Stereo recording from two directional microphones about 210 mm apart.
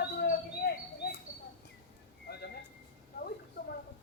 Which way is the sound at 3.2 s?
45° left (ahead or behind).